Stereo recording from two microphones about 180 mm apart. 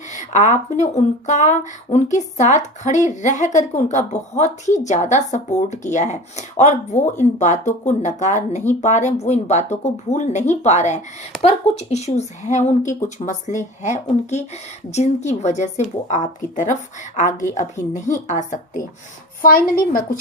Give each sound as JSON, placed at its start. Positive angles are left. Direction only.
{"t": 0.1, "sound": "a woman's voice", "side_deg": 40}